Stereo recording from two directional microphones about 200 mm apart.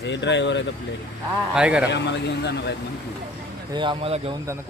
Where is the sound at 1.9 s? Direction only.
60° left (ahead or behind).